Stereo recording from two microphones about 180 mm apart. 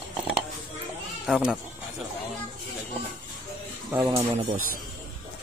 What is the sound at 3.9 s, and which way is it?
Speech, 15° right (ahead or behind).